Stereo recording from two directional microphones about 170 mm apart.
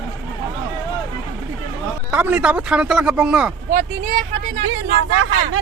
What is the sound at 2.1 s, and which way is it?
Speech, 10° right (ahead or behind).